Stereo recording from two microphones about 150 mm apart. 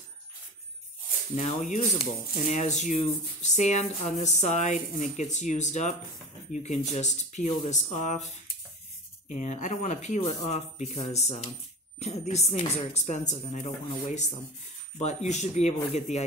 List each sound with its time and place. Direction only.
1.3 s speech: 50° left (ahead or behind)
9.3 s speech: 55° left (ahead or behind)